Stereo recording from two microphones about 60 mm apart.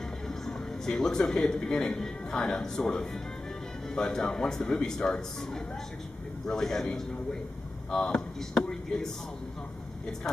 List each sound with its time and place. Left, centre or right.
0.3 s speech: centre
7.9 s speech: centre
8.4 s speech: centre